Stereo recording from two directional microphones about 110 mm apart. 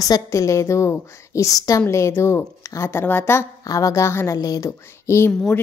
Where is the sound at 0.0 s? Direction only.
30° left (ahead or behind).